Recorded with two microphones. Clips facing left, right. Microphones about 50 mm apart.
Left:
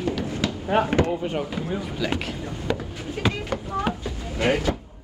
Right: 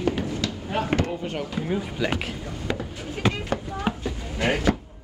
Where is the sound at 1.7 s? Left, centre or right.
Centre.